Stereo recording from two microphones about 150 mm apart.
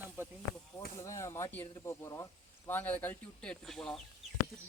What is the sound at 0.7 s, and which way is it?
Speech, 20° left (ahead or behind).